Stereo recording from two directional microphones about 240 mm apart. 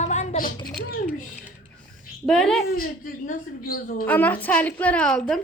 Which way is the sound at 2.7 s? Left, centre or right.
Left.